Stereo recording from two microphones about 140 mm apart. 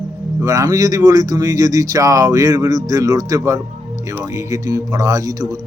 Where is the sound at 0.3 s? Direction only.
25° right (ahead or behind).